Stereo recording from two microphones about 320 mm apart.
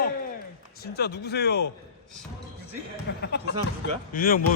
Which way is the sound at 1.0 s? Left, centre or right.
Left.